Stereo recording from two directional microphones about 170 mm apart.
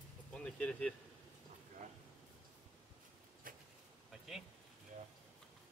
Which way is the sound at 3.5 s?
55° right (ahead or behind).